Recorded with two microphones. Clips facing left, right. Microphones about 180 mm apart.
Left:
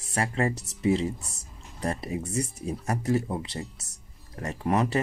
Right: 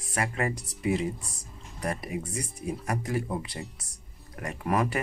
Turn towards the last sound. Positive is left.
turn(degrees=25)  # may be behind; listen again after turning